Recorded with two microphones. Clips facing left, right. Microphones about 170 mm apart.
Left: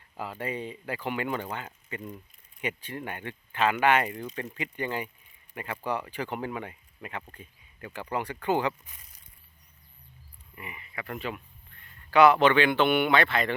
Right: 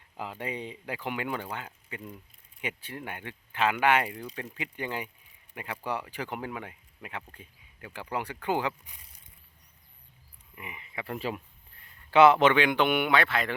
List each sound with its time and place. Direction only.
0.2 s speech: 15° right (ahead or behind)
10.5 s speech: 15° right (ahead or behind)